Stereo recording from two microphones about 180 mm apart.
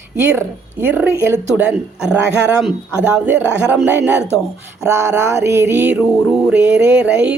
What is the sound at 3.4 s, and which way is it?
Speech, 10° right (ahead or behind).